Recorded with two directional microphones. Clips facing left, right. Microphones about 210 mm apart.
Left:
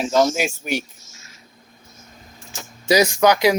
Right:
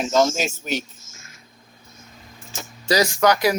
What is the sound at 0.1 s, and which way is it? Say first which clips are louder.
Speech: left 1 dB; 10° left (ahead or behind).